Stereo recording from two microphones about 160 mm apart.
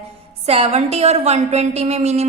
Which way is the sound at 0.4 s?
40° right (ahead or behind).